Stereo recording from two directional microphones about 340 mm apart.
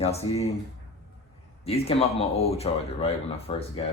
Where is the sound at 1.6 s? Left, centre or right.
Centre.